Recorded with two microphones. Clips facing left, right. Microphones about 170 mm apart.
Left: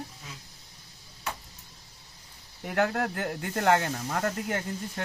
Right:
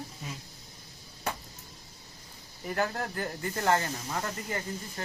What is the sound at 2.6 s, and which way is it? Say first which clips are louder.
Speech: left 4 dB; 65° left (ahead or behind).